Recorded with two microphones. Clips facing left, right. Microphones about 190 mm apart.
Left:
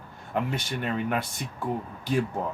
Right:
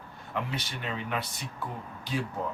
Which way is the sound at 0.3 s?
50° left (ahead or behind).